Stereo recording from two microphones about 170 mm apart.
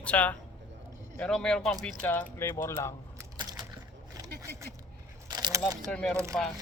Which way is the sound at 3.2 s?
25° right (ahead or behind).